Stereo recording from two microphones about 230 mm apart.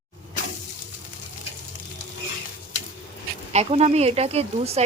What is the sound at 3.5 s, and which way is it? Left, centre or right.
Speech, right.